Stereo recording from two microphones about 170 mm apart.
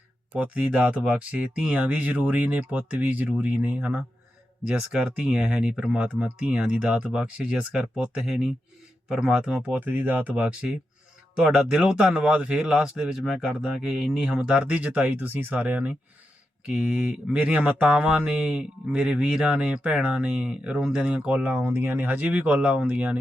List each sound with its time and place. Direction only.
0.3 s speech: 5° right (ahead or behind)